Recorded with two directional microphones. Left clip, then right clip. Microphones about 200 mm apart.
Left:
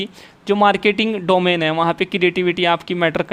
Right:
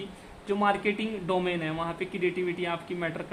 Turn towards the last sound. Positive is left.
turn(degrees=55)  # may be behind; listen again after turning